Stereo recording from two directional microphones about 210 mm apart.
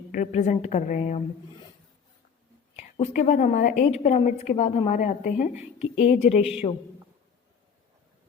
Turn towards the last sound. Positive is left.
turn(degrees=25)  # may be behind; listen again after turning